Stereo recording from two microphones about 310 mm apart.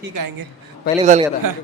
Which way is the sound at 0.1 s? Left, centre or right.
Right.